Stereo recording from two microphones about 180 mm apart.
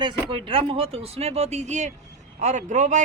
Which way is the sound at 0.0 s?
25° right (ahead or behind).